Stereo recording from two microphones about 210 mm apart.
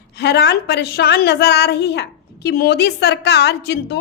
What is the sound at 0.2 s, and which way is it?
A woman's voice, 50° left (ahead or behind).